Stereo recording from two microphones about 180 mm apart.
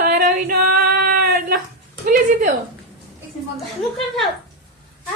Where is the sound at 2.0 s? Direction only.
45° right (ahead or behind).